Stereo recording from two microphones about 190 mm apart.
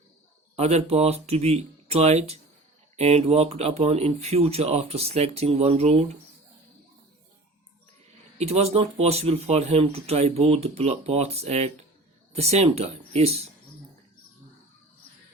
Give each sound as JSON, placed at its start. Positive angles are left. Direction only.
{"t": 0.5, "sound": "speech", "side_deg": -35}
{"t": 8.4, "sound": "speech", "side_deg": -35}